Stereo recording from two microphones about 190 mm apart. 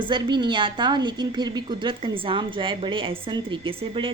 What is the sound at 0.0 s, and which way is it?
A woman's voice, 25° right (ahead or behind).